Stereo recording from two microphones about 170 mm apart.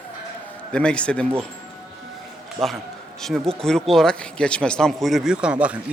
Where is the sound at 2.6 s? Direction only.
20° right (ahead or behind).